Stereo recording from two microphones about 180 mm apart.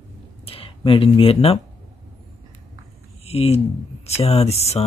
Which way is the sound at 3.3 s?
35° left (ahead or behind).